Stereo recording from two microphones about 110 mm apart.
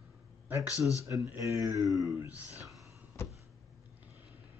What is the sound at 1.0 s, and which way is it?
Speech, 25° right (ahead or behind).